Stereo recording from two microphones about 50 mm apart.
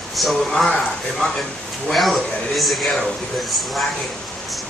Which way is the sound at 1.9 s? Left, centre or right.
Centre.